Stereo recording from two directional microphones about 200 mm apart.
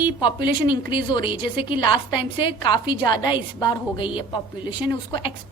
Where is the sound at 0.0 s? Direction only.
25° left (ahead or behind).